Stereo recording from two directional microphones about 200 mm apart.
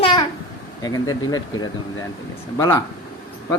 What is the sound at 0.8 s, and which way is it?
Speech, 20° left (ahead or behind).